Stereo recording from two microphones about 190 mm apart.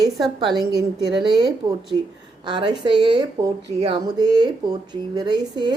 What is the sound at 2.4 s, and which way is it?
Speech, 25° right (ahead or behind).